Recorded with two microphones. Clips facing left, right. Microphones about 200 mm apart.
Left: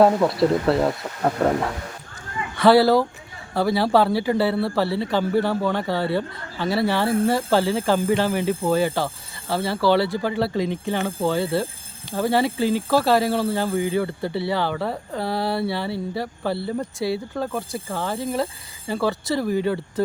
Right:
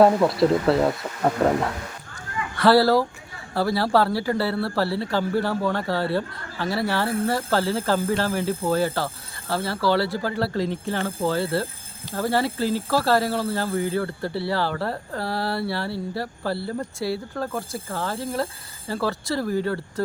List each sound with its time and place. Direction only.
0.0 s speech: centre (ahead or behind)
2.6 s speech: 20° left (ahead or behind)